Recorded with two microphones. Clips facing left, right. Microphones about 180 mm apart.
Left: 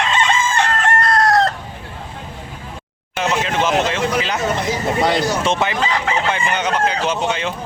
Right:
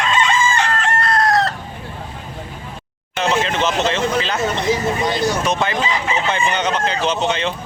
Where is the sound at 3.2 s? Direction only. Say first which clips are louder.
Right 1 dB; 10° left (ahead or behind).